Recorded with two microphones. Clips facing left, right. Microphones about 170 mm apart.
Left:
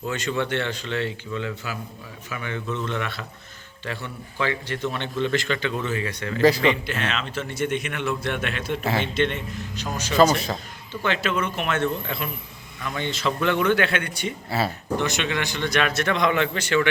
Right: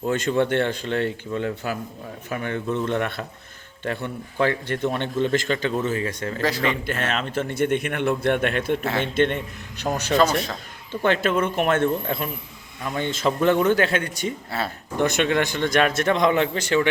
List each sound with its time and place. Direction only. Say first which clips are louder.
0.1 s a man's voice: right 5 dB; 50° right (ahead or behind)
6.4 s a man's voice: left 6 dB; centre (ahead or behind)
6.8 s a man's voice: right 2 dB; 45° right (ahead or behind)
8.8 s a man's voice: even; centre (ahead or behind)
9.1 s a man's voice: right 3 dB; 50° right (ahead or behind)
10.2 s a man's voice: left 3 dB; centre (ahead or behind)
11.0 s a man's voice: right 4 dB; 50° right (ahead or behind)
12.8 s speech: right 3 dB; 35° right (ahead or behind)
13.1 s a man's voice: right 4 dB; 45° right (ahead or behind)